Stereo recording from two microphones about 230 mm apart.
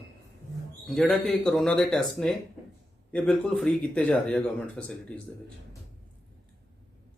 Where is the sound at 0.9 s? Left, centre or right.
Centre.